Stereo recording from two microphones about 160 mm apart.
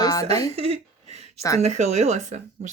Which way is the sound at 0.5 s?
40° right (ahead or behind).